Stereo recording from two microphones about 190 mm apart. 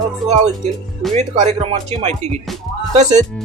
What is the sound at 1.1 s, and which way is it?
Speech, 35° right (ahead or behind).